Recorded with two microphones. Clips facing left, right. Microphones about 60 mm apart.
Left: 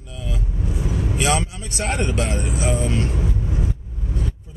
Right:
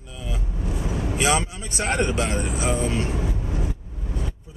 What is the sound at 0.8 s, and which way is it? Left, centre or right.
Speech, centre.